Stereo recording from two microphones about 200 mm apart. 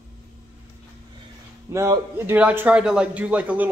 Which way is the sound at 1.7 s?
15° right (ahead or behind).